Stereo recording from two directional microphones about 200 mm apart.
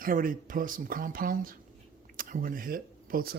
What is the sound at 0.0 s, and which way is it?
Speech, 45° right (ahead or behind).